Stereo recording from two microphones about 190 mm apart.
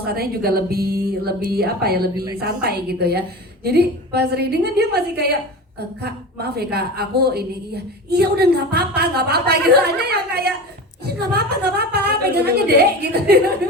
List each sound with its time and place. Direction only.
0.0 s a woman's voice: 55° right (ahead or behind)
2.1 s a woman's voice: 20° right (ahead or behind)
2.4 s a woman's voice: 55° right (ahead or behind)